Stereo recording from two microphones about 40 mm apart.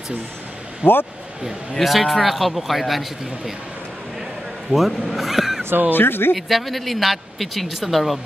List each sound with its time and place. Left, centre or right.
0.8 s speech: right
1.8 s speech: centre
4.6 s speech: centre
5.9 s speech: left
6.3 s speech: centre